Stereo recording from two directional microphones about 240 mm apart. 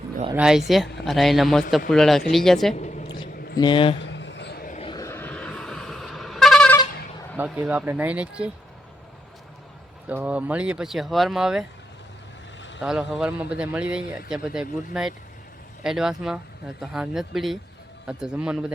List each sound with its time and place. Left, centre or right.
0.3 s a man's voice: centre
3.6 s speech: left
3.9 s a sound: left
4.9 s vehicle: centre
7.3 s a man's voice: centre
10.1 s a man's voice: centre
12.8 s a man's voice: centre